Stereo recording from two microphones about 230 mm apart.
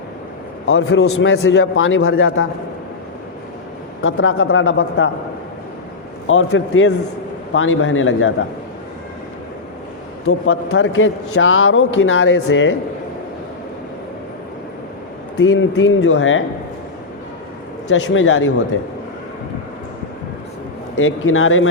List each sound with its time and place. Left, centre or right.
0.7 s a man's voice: left
4.0 s a man's voice: left
6.2 s a man's voice: left
10.2 s a man's voice: left
15.4 s a man's voice: left
17.8 s a man's voice: left
21.0 s a man's voice: left